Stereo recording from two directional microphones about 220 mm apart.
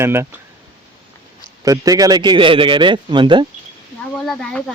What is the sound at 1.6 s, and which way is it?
A man's voice, 15° right (ahead or behind).